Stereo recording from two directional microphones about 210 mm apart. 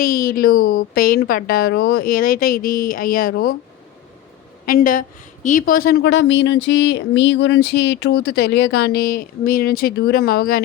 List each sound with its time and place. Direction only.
0.0 s a woman's voice: 45° left (ahead or behind)
4.6 s a woman's voice: 40° left (ahead or behind)